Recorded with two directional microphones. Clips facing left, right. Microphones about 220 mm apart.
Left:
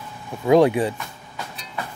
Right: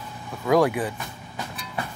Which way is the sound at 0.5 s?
25° left (ahead or behind).